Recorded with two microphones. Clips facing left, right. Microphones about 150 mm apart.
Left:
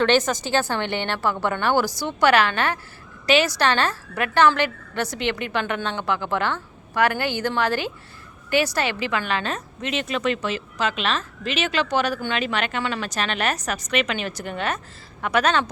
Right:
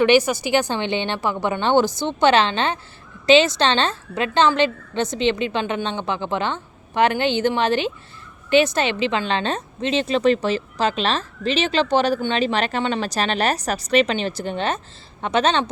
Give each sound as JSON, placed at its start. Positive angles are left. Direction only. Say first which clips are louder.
{"t": 0.0, "sound": "a woman's voice", "louder": "right 3 dB", "side_deg": -10}